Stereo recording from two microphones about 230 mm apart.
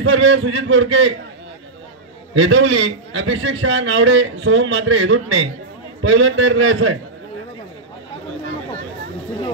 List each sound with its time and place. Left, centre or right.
0.0 s a man's voice: right
2.3 s a man's voice: right